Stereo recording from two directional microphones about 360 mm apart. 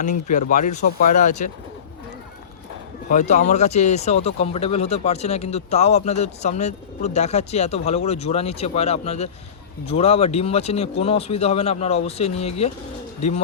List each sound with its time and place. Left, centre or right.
0.0 s speech: centre
3.1 s speech: centre